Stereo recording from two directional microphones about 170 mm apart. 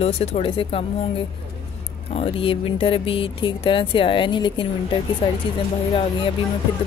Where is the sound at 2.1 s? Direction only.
35° left (ahead or behind).